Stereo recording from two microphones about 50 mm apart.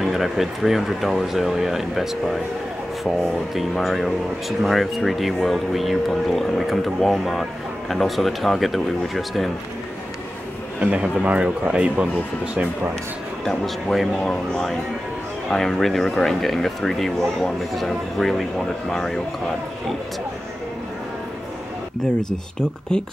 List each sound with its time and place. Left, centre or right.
0.0 s speech: centre
10.8 s speech: right
13.4 s speech: centre
22.6 s speech: centre